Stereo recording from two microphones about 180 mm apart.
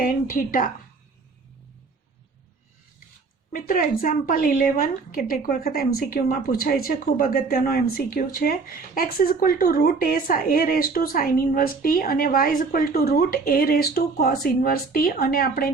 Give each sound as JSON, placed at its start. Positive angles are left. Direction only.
{"t": 0.0, "sound": "a woman's voice", "side_deg": 50}
{"t": 3.5, "sound": "a woman's voice", "side_deg": 50}